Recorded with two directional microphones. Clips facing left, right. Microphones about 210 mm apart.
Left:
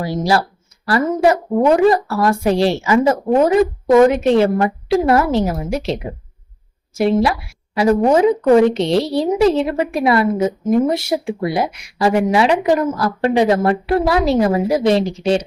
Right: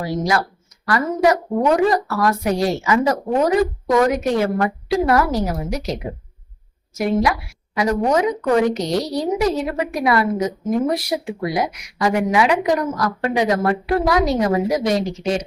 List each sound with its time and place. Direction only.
0.0 s a woman's voice: 30° left (ahead or behind)